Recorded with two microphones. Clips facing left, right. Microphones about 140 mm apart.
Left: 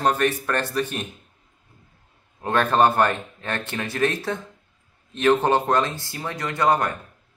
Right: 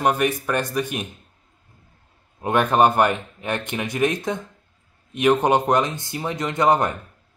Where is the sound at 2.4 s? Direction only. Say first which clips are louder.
Right 2 dB; 15° right (ahead or behind).